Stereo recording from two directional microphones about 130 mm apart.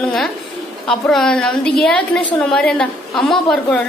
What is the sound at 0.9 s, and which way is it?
A woman's voice, 5° left (ahead or behind).